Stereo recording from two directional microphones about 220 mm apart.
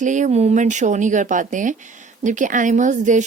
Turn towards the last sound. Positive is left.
turn(degrees=-35)  # may be behind; listen again after turning